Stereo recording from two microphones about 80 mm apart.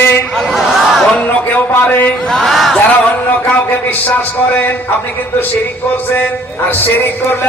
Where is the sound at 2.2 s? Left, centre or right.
Centre.